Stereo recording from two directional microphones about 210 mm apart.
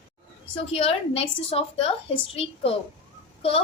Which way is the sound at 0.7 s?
30° left (ahead or behind).